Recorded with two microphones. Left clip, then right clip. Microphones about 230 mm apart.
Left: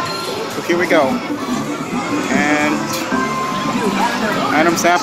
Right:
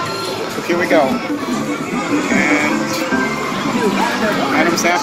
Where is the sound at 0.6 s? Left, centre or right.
Centre.